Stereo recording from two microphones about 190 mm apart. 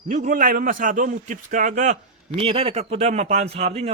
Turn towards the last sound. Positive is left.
turn(degrees=-35)  # may be behind; listen again after turning